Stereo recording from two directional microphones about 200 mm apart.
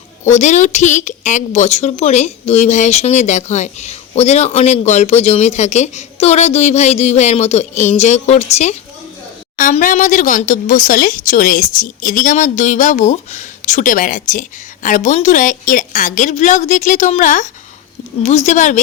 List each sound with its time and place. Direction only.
0.3 s a woman's voice: 35° left (ahead or behind)